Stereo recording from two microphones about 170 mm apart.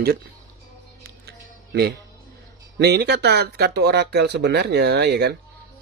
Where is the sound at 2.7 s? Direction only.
75° right (ahead or behind).